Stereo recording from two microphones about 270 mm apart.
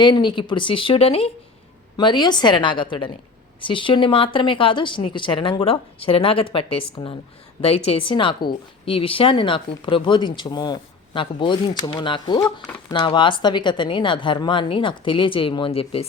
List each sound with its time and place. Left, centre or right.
0.0 s a woman's voice: centre